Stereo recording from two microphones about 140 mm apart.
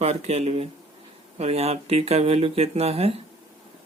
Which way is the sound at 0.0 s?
50° right (ahead or behind).